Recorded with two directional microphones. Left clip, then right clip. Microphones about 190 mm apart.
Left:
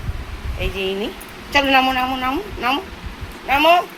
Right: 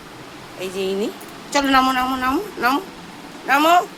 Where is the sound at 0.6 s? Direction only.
15° right (ahead or behind).